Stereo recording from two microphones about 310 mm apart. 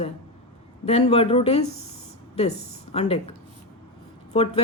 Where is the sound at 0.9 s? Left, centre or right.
Centre.